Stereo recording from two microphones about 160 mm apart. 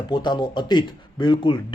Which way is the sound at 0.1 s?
30° left (ahead or behind).